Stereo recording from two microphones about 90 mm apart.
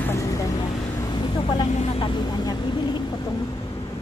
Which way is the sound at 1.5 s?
60° left (ahead or behind).